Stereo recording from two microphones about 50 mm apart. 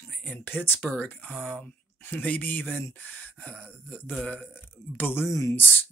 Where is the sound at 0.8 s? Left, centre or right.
Left.